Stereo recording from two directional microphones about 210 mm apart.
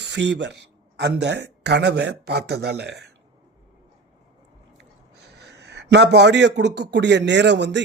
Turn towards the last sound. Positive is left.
turn(degrees=-55)  # may be behind; listen again after turning